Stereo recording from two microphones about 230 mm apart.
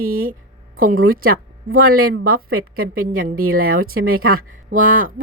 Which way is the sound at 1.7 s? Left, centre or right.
Right.